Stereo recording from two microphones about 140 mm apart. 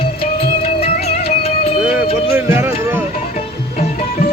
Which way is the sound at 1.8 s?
10° right (ahead or behind).